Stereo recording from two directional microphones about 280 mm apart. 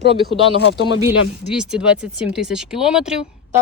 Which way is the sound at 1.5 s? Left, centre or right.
Centre.